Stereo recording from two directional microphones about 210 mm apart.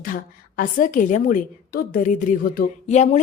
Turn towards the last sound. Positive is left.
turn(degrees=40)  # may be behind; listen again after turning